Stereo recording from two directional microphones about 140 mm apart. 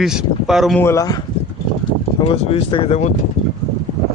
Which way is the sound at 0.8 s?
20° left (ahead or behind).